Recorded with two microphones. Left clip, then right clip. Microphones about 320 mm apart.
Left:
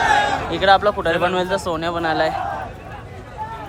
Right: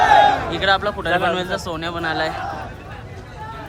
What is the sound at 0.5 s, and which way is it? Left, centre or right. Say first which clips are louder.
A man's voice: left 4 dB; centre.